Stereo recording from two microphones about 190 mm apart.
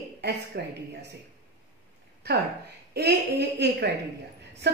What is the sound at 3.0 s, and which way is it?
Speech, 60° right (ahead or behind).